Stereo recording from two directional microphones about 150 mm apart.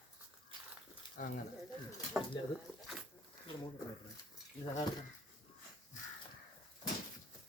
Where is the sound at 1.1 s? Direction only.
70° left (ahead or behind).